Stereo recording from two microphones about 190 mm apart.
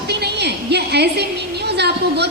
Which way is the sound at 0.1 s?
60° right (ahead or behind).